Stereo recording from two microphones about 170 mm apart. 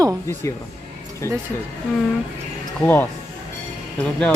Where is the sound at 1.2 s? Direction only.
15° left (ahead or behind).